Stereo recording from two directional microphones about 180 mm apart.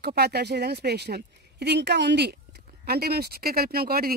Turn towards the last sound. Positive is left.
turn(degrees=-55)  # may be behind; listen again after turning